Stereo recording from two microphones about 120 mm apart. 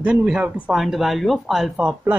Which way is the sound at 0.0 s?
10° right (ahead or behind).